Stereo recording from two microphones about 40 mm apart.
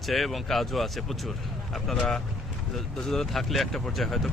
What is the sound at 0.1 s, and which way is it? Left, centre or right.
Speech, centre.